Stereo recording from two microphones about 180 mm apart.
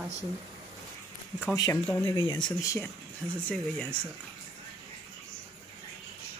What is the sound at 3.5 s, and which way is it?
Speech, 5° left (ahead or behind).